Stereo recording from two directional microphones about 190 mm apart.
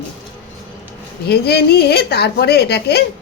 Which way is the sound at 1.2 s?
55° left (ahead or behind).